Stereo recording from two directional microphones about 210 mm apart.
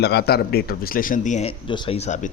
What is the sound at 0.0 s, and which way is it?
Speech, 50° left (ahead or behind).